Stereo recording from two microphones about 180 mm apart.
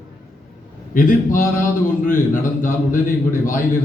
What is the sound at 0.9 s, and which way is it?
A man's voice, 50° left (ahead or behind).